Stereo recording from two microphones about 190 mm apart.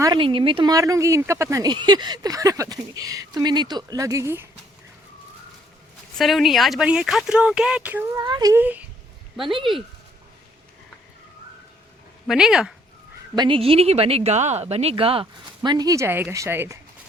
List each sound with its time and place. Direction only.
0.0 s speech: 25° right (ahead or behind)
6.1 s speech: centre (ahead or behind)
8.2 s speech: 20° right (ahead or behind)
12.3 s speech: 5° right (ahead or behind)
13.3 s a woman's voice: 25° right (ahead or behind)